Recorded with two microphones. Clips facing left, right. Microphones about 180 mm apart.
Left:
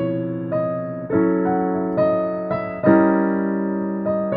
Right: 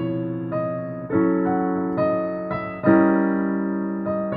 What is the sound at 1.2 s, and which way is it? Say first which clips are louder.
Music: left 1 dB; 40° left (ahead or behind).